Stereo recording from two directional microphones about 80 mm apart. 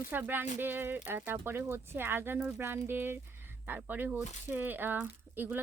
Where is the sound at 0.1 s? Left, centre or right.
Right.